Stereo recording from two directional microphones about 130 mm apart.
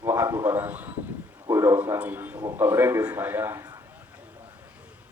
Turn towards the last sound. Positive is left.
turn(degrees=-15)  # may be behind; listen again after turning